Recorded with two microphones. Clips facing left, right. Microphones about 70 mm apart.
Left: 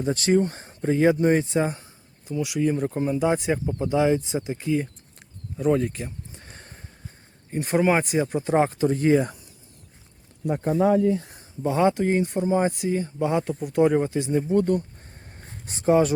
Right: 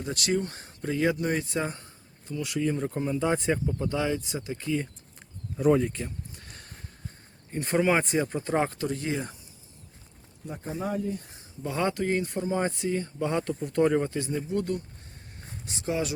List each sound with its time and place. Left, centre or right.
0.0 s speech: left
1.6 s a sound: centre
2.4 s speech: centre
3.8 s speech: centre
5.5 s speech: centre
6.1 s a sound: left
7.5 s speech: centre
8.9 s speech: left
10.4 s speech: left
11.6 s speech: centre
14.3 s speech: left